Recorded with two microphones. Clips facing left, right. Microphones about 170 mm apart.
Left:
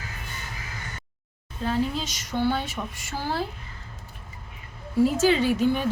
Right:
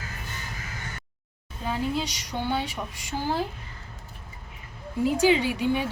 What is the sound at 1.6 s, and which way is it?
A woman's voice, 15° right (ahead or behind).